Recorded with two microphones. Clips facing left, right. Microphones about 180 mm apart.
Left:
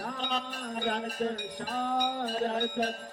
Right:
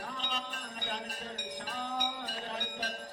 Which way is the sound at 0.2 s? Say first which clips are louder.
Left 6 dB; 55° left (ahead or behind).